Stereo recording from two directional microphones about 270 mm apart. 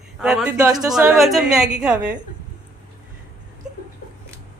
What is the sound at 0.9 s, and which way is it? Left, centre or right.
A woman's voice, centre.